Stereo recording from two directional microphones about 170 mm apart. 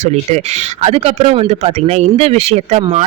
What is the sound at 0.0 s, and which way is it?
Speech, 40° right (ahead or behind).